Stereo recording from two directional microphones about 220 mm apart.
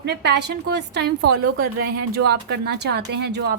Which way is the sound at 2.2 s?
50° right (ahead or behind).